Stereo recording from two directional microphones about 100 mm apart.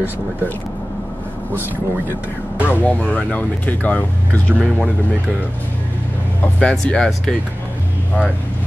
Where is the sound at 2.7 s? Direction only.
15° left (ahead or behind).